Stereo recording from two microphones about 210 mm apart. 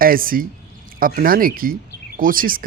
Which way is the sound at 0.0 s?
45° right (ahead or behind).